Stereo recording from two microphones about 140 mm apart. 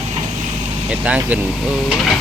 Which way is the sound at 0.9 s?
10° right (ahead or behind).